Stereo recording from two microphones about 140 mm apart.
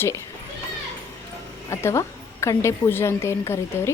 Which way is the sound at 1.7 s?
20° left (ahead or behind).